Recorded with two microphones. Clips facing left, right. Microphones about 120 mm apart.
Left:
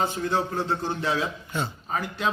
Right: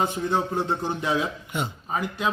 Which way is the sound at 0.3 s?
20° right (ahead or behind).